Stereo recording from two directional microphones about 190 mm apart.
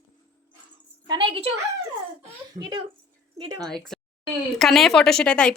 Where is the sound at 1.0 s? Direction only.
25° right (ahead or behind).